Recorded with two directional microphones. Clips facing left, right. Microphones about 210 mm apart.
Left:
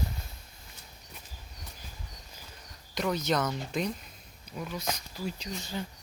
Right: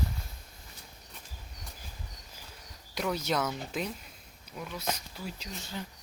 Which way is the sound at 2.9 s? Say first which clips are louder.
Left 2 dB; 5° right (ahead or behind).